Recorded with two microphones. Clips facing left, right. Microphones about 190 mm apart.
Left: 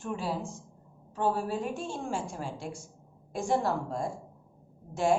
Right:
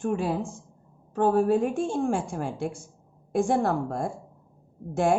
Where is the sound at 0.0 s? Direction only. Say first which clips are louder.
Right 7 dB; 50° right (ahead or behind).